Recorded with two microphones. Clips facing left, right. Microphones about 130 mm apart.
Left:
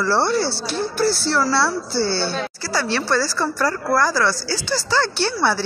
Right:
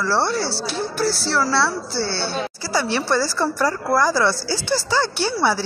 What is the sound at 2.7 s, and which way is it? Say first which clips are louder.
Speech: even; 15° right (ahead or behind).